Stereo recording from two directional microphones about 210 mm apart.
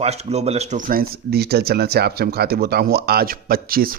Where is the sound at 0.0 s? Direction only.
30° right (ahead or behind).